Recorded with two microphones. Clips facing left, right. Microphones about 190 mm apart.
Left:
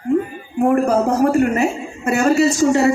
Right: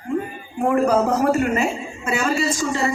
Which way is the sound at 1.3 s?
55° left (ahead or behind).